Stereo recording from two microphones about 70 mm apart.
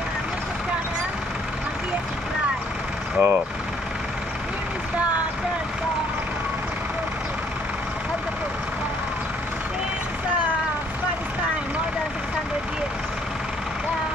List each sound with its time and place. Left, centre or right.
3.2 s speech: centre